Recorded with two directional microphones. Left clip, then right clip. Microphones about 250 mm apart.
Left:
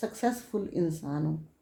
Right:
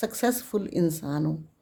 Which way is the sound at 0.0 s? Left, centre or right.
Right.